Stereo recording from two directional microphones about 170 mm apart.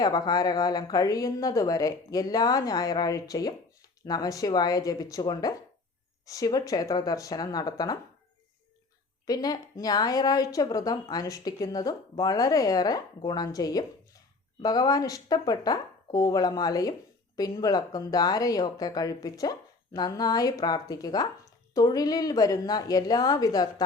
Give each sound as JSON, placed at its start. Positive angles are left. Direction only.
{"t": 0.0, "sound": "a woman's voice", "side_deg": 20}
{"t": 9.2, "sound": "a woman's voice", "side_deg": 20}